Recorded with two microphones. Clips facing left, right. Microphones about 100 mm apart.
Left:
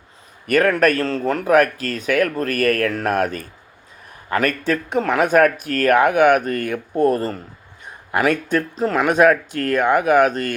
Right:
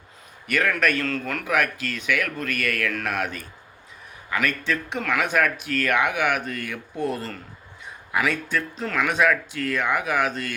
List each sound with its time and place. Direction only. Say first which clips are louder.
0.4 s speech: left 7 dB; 45° left (ahead or behind)